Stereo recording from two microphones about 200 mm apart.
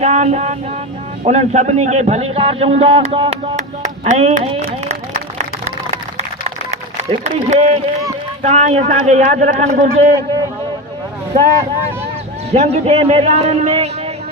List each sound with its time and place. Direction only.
0.0 s a man's voice: 35° right (ahead or behind)
4.0 s a sound: 35° right (ahead or behind)
6.7 s a man's voice: 35° right (ahead or behind)
12.5 s a man's voice: 30° right (ahead or behind)